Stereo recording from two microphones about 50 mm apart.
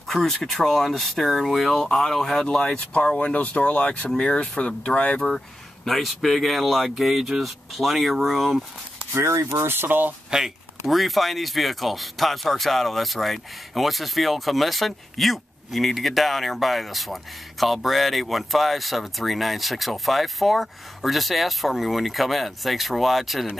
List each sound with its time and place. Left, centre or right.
0.0 s speech: centre
2.4 s speech: centre
5.9 s speech: centre
9.1 s speech: right
9.6 s speech: right
10.3 s speech: centre